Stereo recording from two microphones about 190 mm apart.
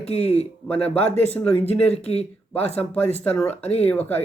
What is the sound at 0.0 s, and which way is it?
Speech, 30° left (ahead or behind).